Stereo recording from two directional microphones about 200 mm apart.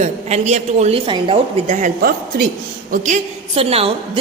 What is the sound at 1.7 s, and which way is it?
A woman's voice, 40° right (ahead or behind).